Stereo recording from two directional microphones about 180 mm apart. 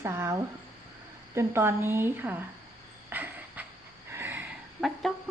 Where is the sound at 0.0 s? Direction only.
15° right (ahead or behind).